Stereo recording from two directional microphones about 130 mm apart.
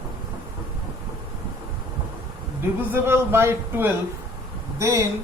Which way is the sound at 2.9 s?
20° right (ahead or behind).